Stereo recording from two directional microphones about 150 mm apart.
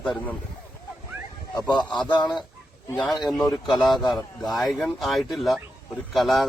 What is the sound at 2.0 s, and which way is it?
Speech, 30° left (ahead or behind).